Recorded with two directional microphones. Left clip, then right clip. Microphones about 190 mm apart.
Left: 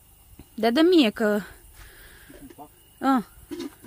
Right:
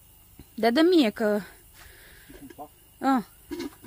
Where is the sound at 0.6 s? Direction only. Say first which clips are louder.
Left 2 dB; 10° left (ahead or behind).